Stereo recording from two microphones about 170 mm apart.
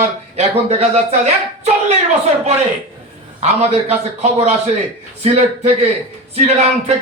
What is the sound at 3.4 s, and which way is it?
A man's voice, 40° right (ahead or behind).